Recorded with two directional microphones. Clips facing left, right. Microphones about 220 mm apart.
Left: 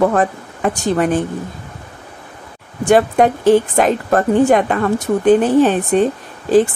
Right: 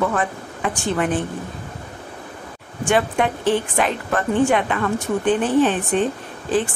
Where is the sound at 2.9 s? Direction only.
40° left (ahead or behind).